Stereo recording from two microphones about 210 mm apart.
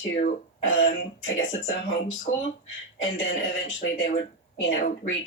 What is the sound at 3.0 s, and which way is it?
Speech, 65° left (ahead or behind).